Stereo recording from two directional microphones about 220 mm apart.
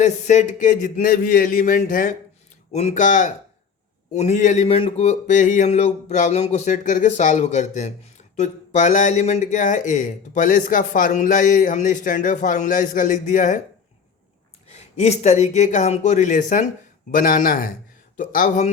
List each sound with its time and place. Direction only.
0.0 s speech: 35° left (ahead or behind)
14.7 s speech: 30° left (ahead or behind)